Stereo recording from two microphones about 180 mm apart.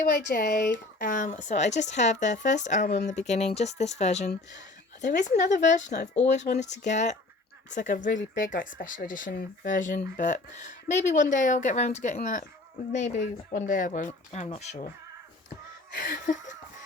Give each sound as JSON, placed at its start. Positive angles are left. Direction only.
{"t": 0.3, "sound": "a woman's voice", "side_deg": 55}
{"t": 16.0, "sound": "speech", "side_deg": 55}